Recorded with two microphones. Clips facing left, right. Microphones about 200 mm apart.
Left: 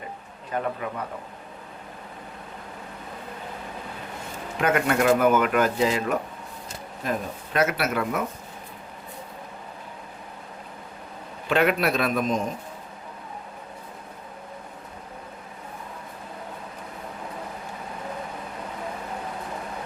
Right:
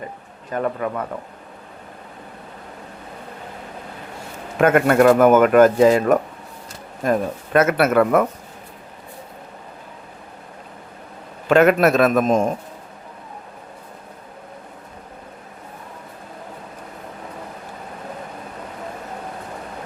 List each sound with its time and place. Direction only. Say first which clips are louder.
0.5 s speech: right 6 dB; 50° right (ahead or behind)
4.5 s speech: right 8 dB; 50° right (ahead or behind)
11.4 s speech: right 8 dB; 45° right (ahead or behind)